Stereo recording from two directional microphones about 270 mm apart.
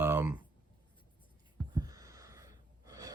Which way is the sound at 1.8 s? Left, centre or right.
Centre.